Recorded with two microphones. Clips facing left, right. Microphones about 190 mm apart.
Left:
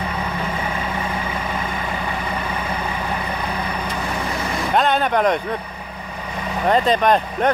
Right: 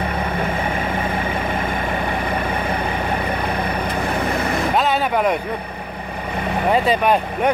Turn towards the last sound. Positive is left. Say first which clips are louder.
# even
turn(degrees=-10)  # may be behind; listen again after turning